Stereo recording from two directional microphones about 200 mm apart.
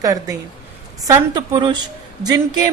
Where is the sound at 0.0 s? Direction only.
15° right (ahead or behind).